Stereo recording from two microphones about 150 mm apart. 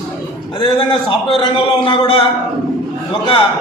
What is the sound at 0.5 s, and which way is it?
A man's voice, 35° left (ahead or behind).